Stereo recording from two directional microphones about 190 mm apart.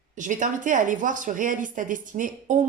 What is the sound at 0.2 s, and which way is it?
A woman's voice, 45° right (ahead or behind).